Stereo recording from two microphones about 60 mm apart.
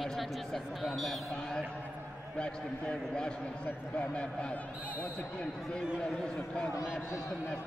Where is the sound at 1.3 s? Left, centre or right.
Centre.